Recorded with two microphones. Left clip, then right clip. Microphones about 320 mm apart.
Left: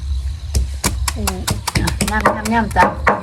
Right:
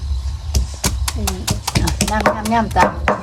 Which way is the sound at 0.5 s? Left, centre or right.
Centre.